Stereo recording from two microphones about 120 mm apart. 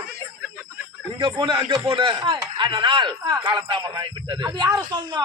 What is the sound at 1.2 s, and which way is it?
A man's voice, 45° right (ahead or behind).